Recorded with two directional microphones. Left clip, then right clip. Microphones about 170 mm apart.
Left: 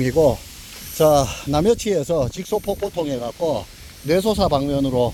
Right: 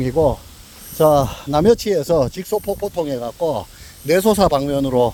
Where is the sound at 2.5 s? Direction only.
Centre (ahead or behind).